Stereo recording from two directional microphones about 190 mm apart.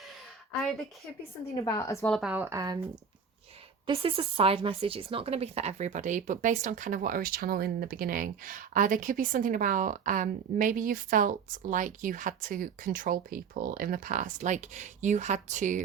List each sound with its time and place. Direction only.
0.6 s speech: centre (ahead or behind)
1.6 s a woman's voice: 15° left (ahead or behind)
2.0 s a woman's voice: centre (ahead or behind)
2.3 s speech: 15° right (ahead or behind)
3.8 s speech: 30° right (ahead or behind)